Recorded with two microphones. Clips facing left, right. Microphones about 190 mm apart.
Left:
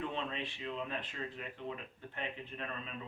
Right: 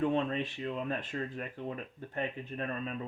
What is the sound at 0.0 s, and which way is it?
Speech, 45° right (ahead or behind).